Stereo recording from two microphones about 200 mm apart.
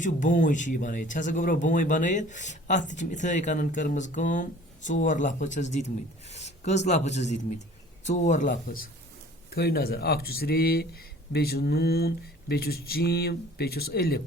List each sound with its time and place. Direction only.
0.0 s speech: 40° left (ahead or behind)